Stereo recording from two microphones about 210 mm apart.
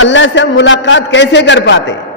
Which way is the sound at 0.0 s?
65° left (ahead or behind).